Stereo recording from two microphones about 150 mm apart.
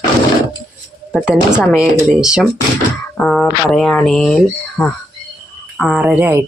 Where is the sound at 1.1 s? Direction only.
5° right (ahead or behind).